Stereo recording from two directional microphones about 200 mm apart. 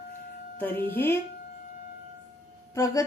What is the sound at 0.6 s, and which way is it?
Speech, 10° left (ahead or behind).